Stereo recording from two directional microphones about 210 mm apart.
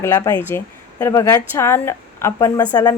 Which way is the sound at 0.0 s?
15° left (ahead or behind).